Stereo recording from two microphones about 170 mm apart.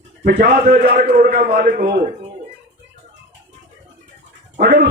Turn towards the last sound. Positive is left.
turn(degrees=-80)